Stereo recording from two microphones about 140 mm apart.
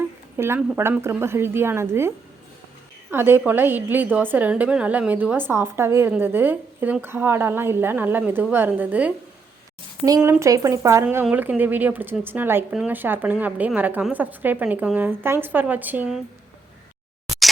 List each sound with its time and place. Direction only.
0.3 s a woman's voice: 15° right (ahead or behind)
10.4 s a woman's voice: 25° right (ahead or behind)